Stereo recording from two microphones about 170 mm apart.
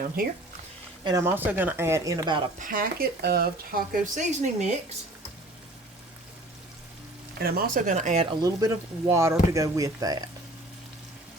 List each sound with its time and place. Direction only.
0.2 s speech: 60° right (ahead or behind)
1.0 s speech: 15° right (ahead or behind)
2.6 s speech: 55° right (ahead or behind)
7.3 s speech: 60° right (ahead or behind); by 10.2 s 20° right (ahead or behind)